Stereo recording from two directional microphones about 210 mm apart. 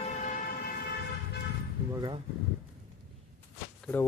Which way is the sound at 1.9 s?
20° right (ahead or behind).